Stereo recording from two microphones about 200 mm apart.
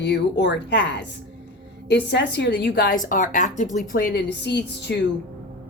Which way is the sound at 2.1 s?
60° left (ahead or behind).